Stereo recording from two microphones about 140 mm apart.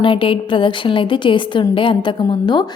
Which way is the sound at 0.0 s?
35° left (ahead or behind).